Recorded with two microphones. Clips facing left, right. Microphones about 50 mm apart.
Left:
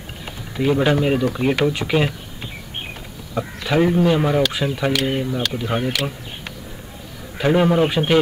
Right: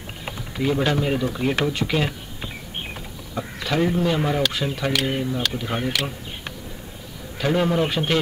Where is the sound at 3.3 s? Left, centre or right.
Centre.